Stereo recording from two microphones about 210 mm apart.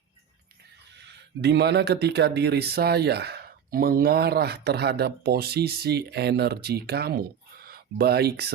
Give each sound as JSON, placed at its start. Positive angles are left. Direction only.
{"t": 1.4, "sound": "speech", "side_deg": -55}